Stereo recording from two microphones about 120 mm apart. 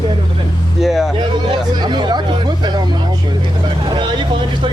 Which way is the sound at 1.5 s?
40° right (ahead or behind).